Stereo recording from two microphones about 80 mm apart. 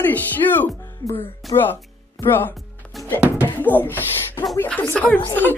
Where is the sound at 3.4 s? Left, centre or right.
Left.